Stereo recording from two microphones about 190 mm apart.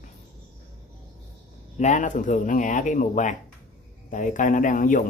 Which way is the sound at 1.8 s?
40° left (ahead or behind).